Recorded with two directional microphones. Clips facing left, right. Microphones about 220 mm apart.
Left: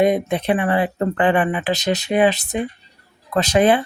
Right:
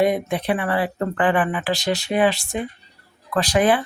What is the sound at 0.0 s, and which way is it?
Speech, 20° left (ahead or behind).